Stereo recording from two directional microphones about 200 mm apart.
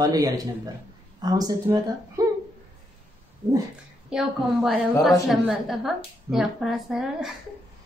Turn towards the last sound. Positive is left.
turn(degrees=0)  # may be behind; listen again after turning